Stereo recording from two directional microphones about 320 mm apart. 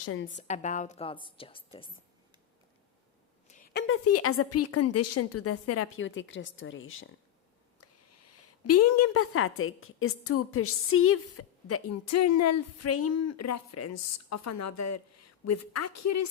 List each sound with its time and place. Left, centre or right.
0.0 s a woman's voice: left
0.3 s a woman's voice: left
3.5 s a woman's voice: left